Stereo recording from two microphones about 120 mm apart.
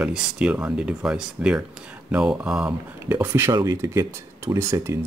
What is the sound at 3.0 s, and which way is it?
Speech, 20° right (ahead or behind).